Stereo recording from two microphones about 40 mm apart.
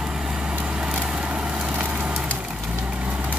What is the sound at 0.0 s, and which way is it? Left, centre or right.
Vehicle, centre.